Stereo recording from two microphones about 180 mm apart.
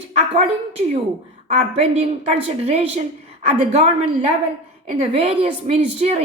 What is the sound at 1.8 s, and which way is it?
Speech, 35° right (ahead or behind).